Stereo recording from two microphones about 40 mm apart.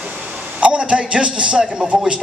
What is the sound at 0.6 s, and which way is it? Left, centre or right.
A man's voice, right.